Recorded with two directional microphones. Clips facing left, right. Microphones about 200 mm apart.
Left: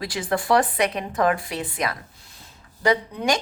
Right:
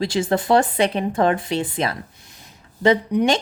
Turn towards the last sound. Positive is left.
turn(degrees=-25)  # may be behind; listen again after turning